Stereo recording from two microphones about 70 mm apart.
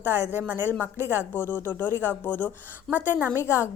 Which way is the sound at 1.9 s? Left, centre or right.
Right.